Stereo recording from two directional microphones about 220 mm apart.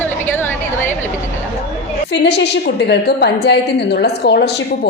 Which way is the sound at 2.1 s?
50° left (ahead or behind).